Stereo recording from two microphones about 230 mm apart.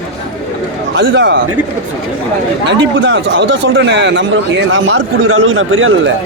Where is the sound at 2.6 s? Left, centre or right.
Right.